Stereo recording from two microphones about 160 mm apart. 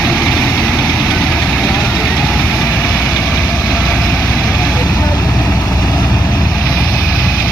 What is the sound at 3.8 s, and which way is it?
Vehicle, 10° left (ahead or behind).